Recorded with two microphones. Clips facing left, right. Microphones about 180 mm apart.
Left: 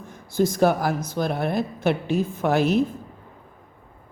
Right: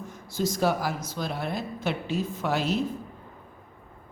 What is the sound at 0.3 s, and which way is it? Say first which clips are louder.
A woman's voice: left 6 dB; 55° left (ahead or behind).